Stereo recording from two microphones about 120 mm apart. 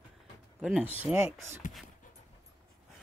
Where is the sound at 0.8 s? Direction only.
15° right (ahead or behind).